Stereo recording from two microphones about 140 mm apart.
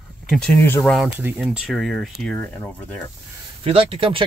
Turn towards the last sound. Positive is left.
turn(degrees=-40)  # may be behind; listen again after turning